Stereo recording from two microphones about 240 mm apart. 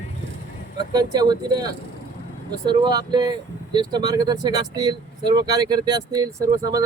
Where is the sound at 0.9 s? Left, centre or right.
Centre.